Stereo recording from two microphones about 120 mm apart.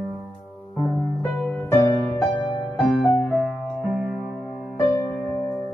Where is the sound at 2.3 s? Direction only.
40° left (ahead or behind).